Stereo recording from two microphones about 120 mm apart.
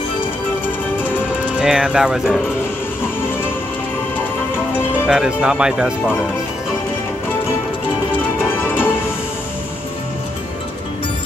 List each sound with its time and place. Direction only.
1.6 s speech: 5° right (ahead or behind)
5.0 s speech: 5° right (ahead or behind)
8.5 s music: 20° left (ahead or behind)